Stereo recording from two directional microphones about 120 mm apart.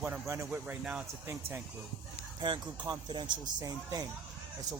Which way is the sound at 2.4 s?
35° right (ahead or behind).